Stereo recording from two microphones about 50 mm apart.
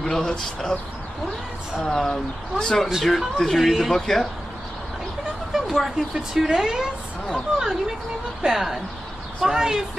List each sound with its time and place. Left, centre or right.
0.0 s speech: centre
1.8 s speech: centre
5.5 s a woman's voice: centre